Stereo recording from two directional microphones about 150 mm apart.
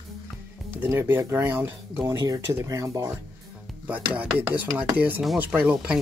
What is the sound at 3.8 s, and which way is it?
Speech, 10° right (ahead or behind).